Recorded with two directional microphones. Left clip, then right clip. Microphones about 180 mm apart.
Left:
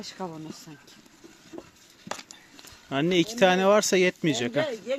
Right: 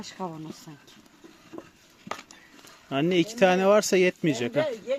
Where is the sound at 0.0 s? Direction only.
45° right (ahead or behind).